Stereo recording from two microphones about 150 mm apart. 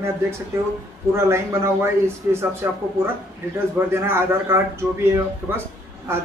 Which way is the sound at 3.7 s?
15° right (ahead or behind).